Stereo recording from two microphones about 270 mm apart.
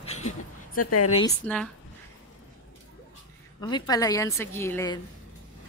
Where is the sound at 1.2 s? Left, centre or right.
Centre.